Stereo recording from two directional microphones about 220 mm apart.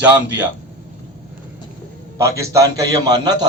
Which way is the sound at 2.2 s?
15° right (ahead or behind).